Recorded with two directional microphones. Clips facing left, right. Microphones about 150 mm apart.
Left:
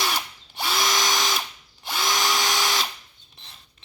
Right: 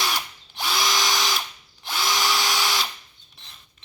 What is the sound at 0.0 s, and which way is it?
Drill, centre (ahead or behind).